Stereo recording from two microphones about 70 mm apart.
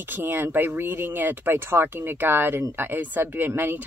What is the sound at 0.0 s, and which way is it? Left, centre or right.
Speech, right.